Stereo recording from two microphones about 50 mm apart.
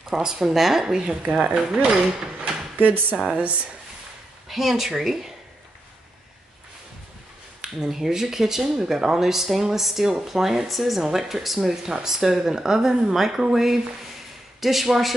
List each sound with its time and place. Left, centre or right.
0.1 s speech: centre
2.8 s speech: right
3.3 s speech: right
4.5 s speech: centre
7.6 s speech: centre